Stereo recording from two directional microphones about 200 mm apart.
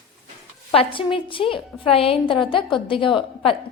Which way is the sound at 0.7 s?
25° left (ahead or behind).